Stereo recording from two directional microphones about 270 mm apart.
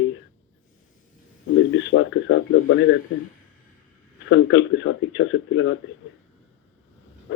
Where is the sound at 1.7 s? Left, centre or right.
Left.